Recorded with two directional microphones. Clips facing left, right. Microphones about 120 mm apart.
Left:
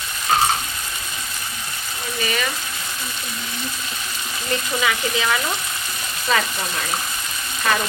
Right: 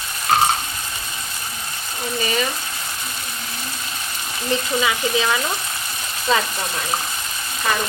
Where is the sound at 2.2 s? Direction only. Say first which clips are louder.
Right 2 dB; 30° right (ahead or behind).